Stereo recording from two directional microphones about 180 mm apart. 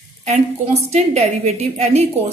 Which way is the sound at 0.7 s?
35° right (ahead or behind).